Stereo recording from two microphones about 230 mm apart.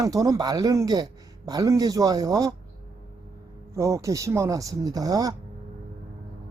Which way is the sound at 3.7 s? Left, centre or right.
Centre.